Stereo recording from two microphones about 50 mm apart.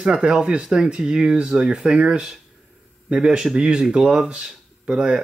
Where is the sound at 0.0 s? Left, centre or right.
Centre.